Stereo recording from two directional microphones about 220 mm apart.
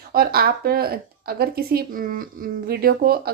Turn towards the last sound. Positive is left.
turn(degrees=-45)  # may be behind; listen again after turning